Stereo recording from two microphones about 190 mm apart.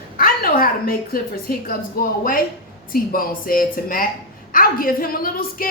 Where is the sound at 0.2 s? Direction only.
50° left (ahead or behind).